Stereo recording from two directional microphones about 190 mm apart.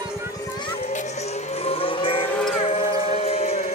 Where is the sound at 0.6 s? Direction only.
35° left (ahead or behind).